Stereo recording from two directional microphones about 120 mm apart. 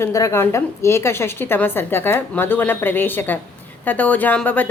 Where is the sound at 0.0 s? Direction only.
25° left (ahead or behind).